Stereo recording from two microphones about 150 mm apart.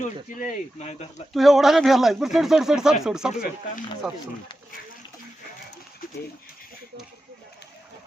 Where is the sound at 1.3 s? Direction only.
Centre (ahead or behind).